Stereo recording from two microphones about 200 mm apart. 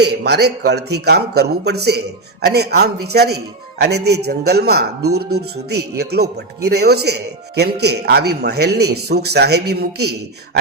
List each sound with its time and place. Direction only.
0.0 s a man's voice: 55° right (ahead or behind)